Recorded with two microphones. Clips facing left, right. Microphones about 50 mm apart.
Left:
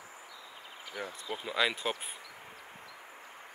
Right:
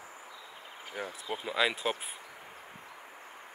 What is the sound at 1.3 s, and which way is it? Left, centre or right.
Speech, centre.